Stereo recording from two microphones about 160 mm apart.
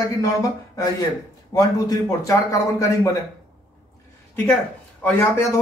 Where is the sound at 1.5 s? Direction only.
25° left (ahead or behind).